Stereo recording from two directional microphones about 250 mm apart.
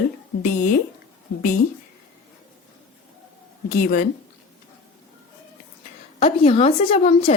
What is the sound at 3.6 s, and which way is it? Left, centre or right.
Speech, left.